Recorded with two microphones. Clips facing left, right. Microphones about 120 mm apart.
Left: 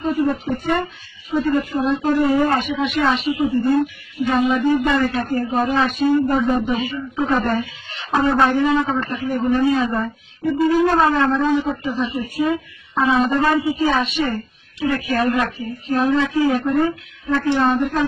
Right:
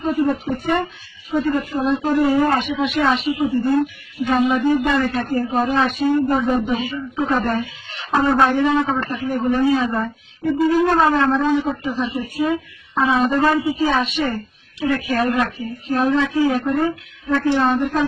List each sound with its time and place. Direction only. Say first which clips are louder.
0.0 s a man's voice: even; centre (ahead or behind)